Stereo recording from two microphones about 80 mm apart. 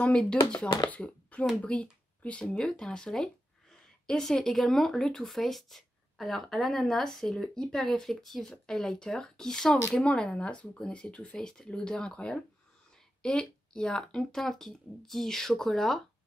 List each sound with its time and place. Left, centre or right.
0.0 s speech: centre